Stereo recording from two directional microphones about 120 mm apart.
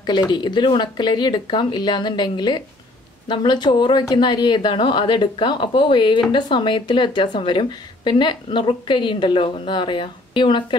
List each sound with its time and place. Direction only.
0.0 s speech: 40° left (ahead or behind)